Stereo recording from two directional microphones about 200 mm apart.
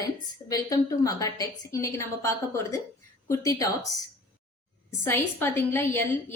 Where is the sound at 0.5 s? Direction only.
15° left (ahead or behind).